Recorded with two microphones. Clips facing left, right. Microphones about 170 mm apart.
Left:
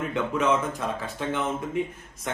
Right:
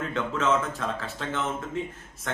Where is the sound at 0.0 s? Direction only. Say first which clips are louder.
Left 2 dB; 15° left (ahead or behind).